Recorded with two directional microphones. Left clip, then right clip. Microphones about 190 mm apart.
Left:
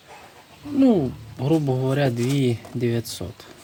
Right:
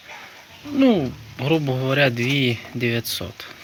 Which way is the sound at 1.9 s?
5° left (ahead or behind).